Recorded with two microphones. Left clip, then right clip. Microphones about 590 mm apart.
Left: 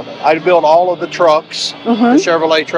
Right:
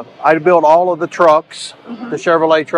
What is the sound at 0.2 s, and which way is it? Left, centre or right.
A man's voice, right.